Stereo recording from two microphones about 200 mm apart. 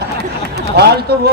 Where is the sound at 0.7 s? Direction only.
55° right (ahead or behind).